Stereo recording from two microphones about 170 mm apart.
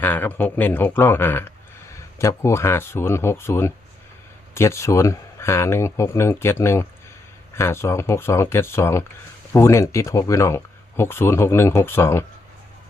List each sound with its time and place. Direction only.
0.0 s speech: 10° left (ahead or behind)